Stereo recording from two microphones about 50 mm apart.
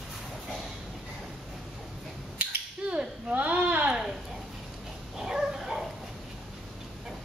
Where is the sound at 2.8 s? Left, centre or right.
Right.